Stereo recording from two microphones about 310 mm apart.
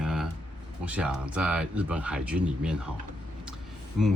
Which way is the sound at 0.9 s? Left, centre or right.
Centre.